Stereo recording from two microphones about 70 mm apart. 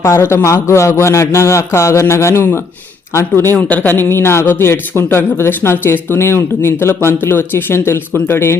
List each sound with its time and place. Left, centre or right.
0.0 s a man's voice: left
3.6 s speech: left